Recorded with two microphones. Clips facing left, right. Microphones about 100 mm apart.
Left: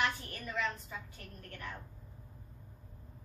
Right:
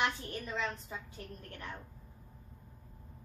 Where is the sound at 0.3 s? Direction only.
20° right (ahead or behind).